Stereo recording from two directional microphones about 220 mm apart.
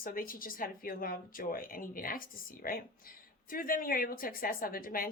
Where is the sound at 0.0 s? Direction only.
40° left (ahead or behind).